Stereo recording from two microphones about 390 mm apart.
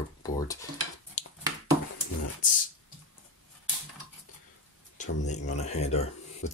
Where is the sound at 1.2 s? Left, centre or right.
Centre.